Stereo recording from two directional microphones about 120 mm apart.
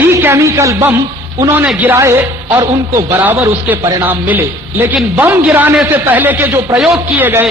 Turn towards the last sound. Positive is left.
turn(degrees=-15)  # may be behind; listen again after turning